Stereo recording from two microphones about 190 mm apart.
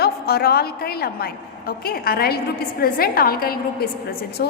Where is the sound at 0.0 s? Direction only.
55° left (ahead or behind).